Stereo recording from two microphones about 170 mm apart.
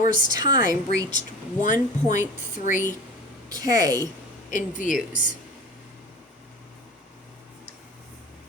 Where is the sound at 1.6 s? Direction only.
45° left (ahead or behind).